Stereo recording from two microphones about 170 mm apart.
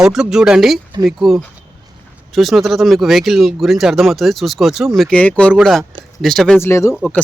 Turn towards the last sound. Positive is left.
turn(degrees=15)  # may be behind; listen again after turning